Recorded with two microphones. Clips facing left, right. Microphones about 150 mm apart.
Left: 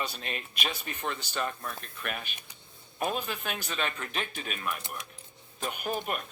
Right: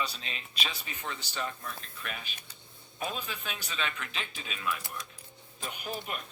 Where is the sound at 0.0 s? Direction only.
50° left (ahead or behind).